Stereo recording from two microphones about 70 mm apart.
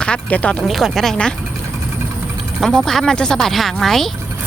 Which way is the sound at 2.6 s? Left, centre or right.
Centre.